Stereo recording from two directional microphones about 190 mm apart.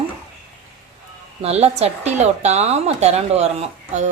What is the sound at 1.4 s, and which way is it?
A woman's voice, 35° right (ahead or behind).